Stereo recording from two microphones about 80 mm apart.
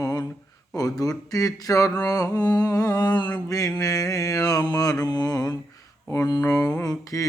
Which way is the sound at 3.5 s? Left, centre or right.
Left.